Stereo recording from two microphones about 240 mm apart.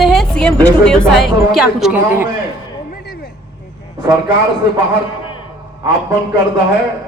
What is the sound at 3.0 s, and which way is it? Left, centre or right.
Vehicle, left.